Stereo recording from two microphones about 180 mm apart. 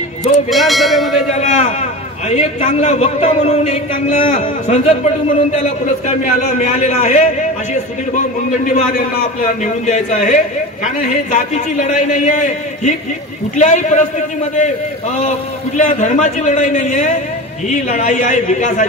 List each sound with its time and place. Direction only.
0.5 s speech: centre (ahead or behind)
1.4 s a man's voice: 40° left (ahead or behind)